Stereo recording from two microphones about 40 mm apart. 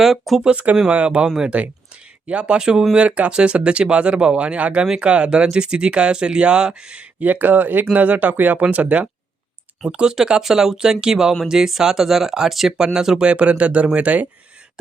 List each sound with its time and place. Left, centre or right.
0.0 s speech: centre
0.9 s speech: right
1.9 s a sound: right
2.6 s speech: centre
7.2 s speech: right
9.9 s speech: right
13.3 s speech: right